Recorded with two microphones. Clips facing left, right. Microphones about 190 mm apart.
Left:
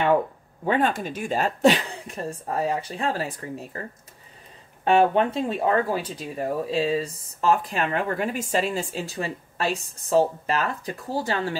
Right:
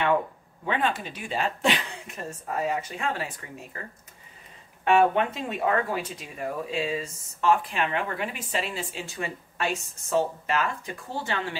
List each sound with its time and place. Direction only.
0.7 s speech: 45° left (ahead or behind)
4.8 s speech: 35° left (ahead or behind)